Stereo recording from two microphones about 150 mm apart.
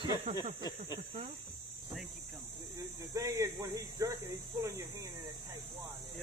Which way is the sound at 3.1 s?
20° right (ahead or behind).